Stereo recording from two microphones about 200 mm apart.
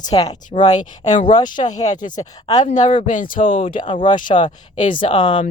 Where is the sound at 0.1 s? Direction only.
20° left (ahead or behind).